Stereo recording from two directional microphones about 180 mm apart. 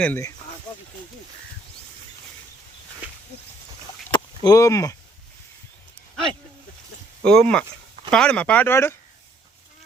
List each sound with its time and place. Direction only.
0.0 s speech: 15° left (ahead or behind)
4.1 s a sound: 20° left (ahead or behind)
7.3 s speech: 5° left (ahead or behind)